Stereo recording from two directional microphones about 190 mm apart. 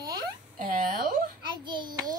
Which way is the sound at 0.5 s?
45° right (ahead or behind).